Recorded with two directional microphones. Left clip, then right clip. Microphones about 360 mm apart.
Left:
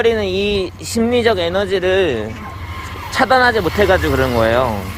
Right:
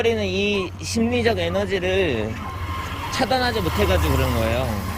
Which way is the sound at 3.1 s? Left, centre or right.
Centre.